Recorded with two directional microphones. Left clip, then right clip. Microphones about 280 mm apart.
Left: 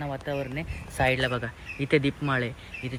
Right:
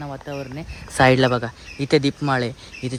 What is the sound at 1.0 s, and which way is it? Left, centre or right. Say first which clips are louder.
Speech: right 9 dB; right.